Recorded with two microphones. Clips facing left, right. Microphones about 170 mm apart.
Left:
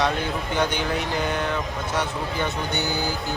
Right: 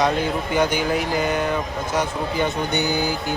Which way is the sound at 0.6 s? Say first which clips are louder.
Right 4 dB; 10° right (ahead or behind).